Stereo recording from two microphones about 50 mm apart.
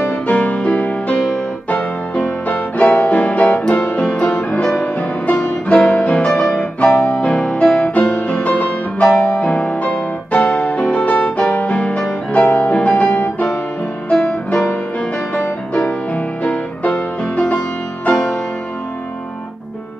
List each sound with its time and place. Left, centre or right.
0.3 s music: left
1.0 s music: centre
5.7 s piano: left
7.6 s music: centre
7.9 s music: left
14.5 s music: left
16.4 s music: left